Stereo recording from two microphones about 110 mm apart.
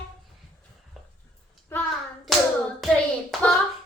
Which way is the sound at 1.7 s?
20° left (ahead or behind).